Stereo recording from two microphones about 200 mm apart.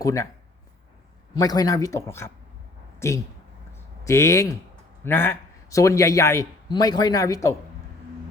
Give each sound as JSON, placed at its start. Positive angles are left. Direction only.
{"t": 0.0, "sound": "a man's voice", "side_deg": 15}
{"t": 1.3, "sound": "a man's voice", "side_deg": 20}